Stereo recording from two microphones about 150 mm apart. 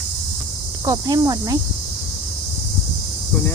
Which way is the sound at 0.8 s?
25° right (ahead or behind).